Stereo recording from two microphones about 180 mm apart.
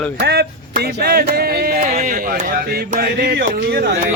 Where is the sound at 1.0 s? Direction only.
60° right (ahead or behind).